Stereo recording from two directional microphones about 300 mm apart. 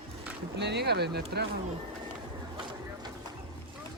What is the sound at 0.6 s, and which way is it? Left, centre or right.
Speech, right.